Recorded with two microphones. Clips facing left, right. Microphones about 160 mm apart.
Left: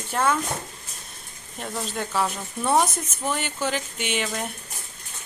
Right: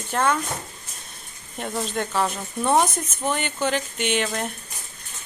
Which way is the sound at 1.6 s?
5° left (ahead or behind).